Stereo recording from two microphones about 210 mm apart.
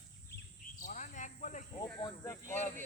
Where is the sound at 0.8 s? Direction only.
35° left (ahead or behind).